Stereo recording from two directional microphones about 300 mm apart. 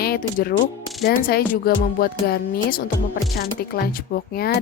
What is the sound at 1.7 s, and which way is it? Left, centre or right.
Music, left.